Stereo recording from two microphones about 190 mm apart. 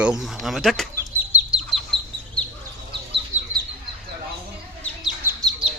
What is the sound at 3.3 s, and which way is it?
Bird, 40° right (ahead or behind).